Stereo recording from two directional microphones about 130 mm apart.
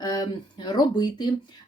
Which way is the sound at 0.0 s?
30° left (ahead or behind).